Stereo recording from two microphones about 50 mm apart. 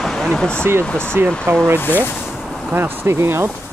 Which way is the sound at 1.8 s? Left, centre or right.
Left.